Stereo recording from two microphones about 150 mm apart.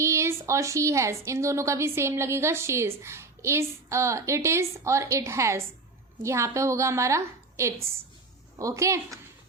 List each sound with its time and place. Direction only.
0.0 s a woman's voice: 20° right (ahead or behind)